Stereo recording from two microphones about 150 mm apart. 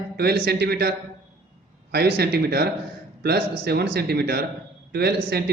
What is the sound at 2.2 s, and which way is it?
A man's voice, 90° right.